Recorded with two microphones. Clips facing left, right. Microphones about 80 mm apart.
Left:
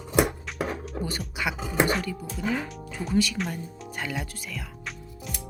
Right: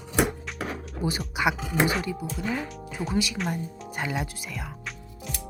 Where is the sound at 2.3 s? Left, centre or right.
Centre.